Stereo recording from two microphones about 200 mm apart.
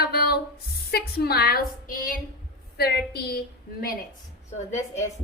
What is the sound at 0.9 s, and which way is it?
A woman's voice, 50° left (ahead or behind).